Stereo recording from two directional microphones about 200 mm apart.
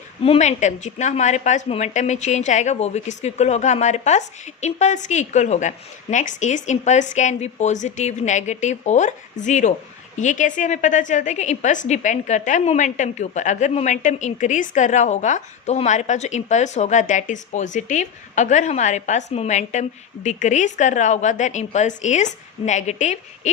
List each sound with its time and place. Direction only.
0.2 s a woman's voice: 30° left (ahead or behind)